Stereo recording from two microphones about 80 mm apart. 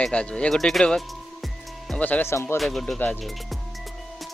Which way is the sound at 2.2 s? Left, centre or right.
Left.